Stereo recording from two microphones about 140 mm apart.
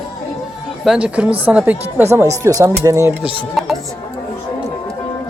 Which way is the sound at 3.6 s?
Centre (ahead or behind).